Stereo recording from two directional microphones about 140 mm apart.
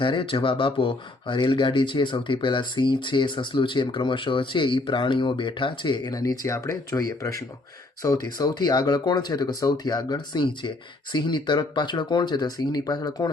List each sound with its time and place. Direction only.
0.0 s speech: 35° left (ahead or behind)